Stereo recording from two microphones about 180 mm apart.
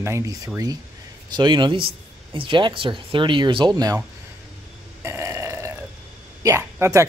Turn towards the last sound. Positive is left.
turn(degrees=-15)  # may be behind; listen again after turning